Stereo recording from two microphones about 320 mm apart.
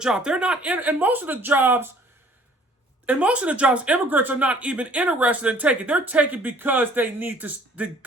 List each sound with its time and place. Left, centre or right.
0.0 s speech: centre
3.1 s speech: centre